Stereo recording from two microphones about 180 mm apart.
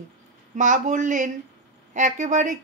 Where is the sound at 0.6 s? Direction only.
45° right (ahead or behind).